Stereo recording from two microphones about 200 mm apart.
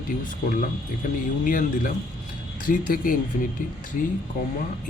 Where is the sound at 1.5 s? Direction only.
45° left (ahead or behind).